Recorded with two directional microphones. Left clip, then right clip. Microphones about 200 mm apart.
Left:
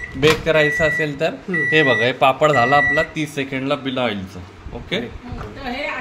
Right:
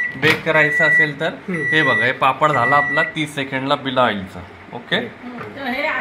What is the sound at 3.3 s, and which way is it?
Speech, 25° left (ahead or behind).